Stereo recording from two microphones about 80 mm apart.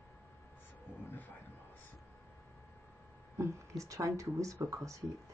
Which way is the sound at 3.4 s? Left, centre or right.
Right.